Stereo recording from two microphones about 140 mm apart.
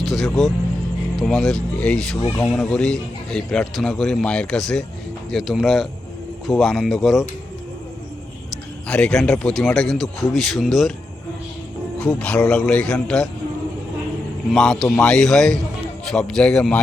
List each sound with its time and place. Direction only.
0.0 s a man's voice: centre (ahead or behind)
8.9 s a man's voice: 5° left (ahead or behind)
11.9 s a man's voice: 5° left (ahead or behind)
14.5 s a man's voice: centre (ahead or behind)